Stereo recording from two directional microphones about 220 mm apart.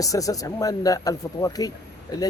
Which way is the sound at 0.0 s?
15° left (ahead or behind).